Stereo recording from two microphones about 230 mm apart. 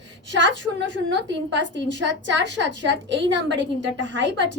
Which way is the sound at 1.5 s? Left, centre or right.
Right.